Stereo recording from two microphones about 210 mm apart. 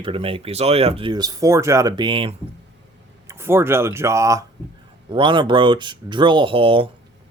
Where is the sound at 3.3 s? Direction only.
10° right (ahead or behind).